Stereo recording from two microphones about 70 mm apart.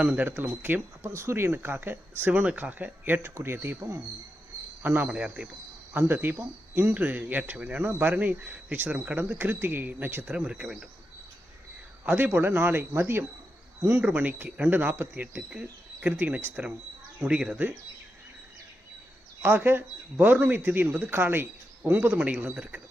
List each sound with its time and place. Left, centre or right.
0.0 s speech: right
5.0 s speech: centre
5.9 s speech: right
10.2 s speech: centre
12.0 s speech: right
14.0 s speech: right
15.4 s speech: centre
16.1 s speech: right
19.4 s speech: right